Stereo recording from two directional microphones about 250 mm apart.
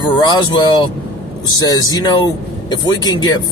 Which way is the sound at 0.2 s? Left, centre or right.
Centre.